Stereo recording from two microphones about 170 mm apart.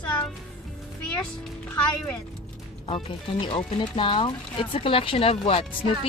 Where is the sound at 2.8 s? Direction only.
30° left (ahead or behind).